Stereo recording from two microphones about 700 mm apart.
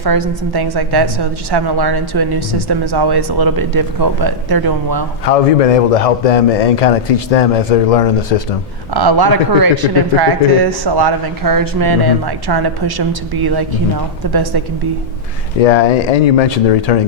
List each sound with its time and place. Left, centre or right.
0.0 s speech: right
5.2 s a man's voice: left
8.9 s speech: right
15.6 s a man's voice: left